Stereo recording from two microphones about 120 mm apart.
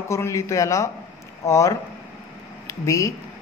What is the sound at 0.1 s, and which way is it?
Speech, 25° left (ahead or behind).